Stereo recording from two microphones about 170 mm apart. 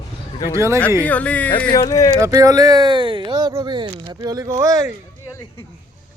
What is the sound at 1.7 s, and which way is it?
Speech, 20° left (ahead or behind).